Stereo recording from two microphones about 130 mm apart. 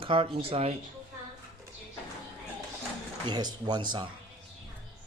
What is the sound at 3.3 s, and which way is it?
Speech, 35° right (ahead or behind).